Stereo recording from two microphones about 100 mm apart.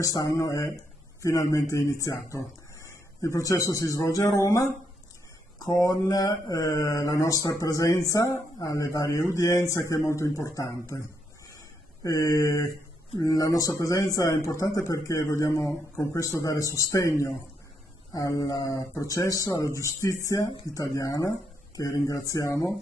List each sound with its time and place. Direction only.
0.0 s mantra: 35° left (ahead or behind)
9.6 s speech: 30° left (ahead or behind)
11.5 s a sound: 35° left (ahead or behind)
13.2 s mantra: 35° left (ahead or behind)